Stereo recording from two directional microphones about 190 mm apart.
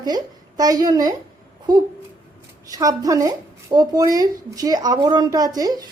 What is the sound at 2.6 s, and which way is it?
Speech, 20° right (ahead or behind).